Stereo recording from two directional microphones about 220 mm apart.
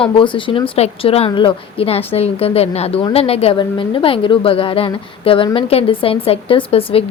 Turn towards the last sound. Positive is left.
turn(degrees=25)  # may be behind; listen again after turning